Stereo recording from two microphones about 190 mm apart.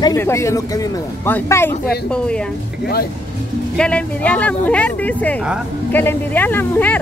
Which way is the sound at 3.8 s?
5° left (ahead or behind).